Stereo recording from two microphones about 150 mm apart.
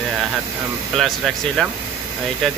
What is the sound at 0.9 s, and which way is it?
Speech, centre (ahead or behind).